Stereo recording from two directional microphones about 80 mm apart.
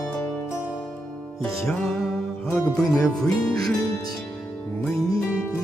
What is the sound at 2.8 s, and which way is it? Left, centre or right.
Music, left.